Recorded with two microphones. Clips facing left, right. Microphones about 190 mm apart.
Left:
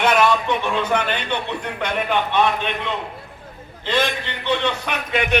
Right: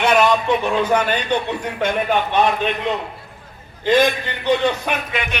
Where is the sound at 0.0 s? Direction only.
15° right (ahead or behind).